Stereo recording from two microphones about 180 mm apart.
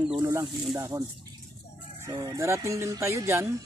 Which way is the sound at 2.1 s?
20° right (ahead or behind).